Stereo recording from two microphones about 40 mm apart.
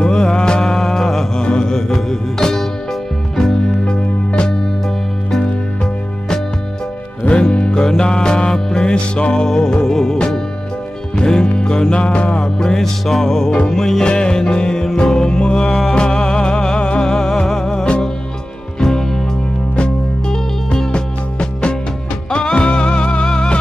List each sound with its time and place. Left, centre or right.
0.1 s music: centre
3.8 s music: left
7.2 s music: left
12.5 s music: centre
20.2 s music: centre